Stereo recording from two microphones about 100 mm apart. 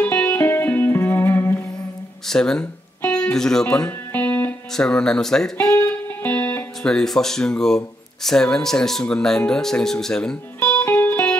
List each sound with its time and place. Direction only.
0.0 s music: 20° left (ahead or behind)
2.2 s speech: 5° left (ahead or behind)
3.0 s music: 10° left (ahead or behind)
4.7 s speech: 5° left (ahead or behind)
5.6 s music: 30° left (ahead or behind)
6.2 s speech: 15° left (ahead or behind)
10.6 s music: 15° left (ahead or behind)